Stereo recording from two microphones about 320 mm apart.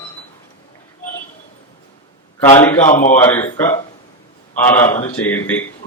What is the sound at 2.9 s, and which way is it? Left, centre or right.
Speech, left.